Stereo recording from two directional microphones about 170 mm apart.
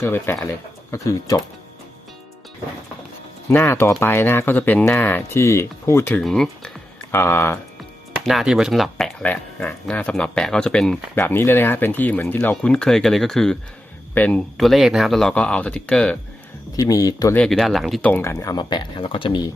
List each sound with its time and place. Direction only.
0.0 s speech: 15° left (ahead or behind)
3.5 s speech: 10° left (ahead or behind)
6.2 s speech: 5° left (ahead or behind)
7.1 s speech: 15° left (ahead or behind)
8.3 s speech: centre (ahead or behind)
16.7 s speech: 20° left (ahead or behind)
17.3 s speech: 5° left (ahead or behind)
18.1 s speech: 15° left (ahead or behind)